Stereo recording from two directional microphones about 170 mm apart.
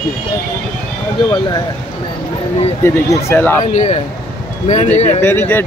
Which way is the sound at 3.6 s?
45° left (ahead or behind).